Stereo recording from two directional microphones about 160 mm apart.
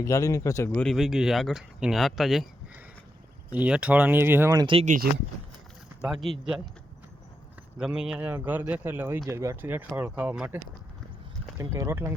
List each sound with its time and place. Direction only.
0.0 s speech: 20° left (ahead or behind); by 2.5 s centre (ahead or behind)
3.5 s speech: 10° right (ahead or behind)
4.6 s speech: 35° right (ahead or behind)
6.0 s speech: centre (ahead or behind)
7.8 s speech: 5° right (ahead or behind)